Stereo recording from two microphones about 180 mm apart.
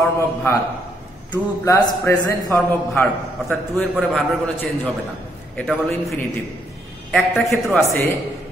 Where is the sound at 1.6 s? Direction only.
15° left (ahead or behind).